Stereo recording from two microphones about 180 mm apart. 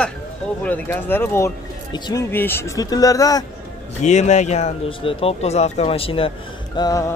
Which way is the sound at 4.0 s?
40° left (ahead or behind).